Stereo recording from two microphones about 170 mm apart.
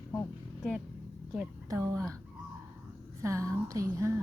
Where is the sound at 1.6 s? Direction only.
15° right (ahead or behind).